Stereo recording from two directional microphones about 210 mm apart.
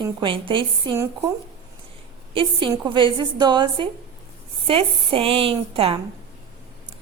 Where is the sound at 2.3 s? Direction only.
25° right (ahead or behind).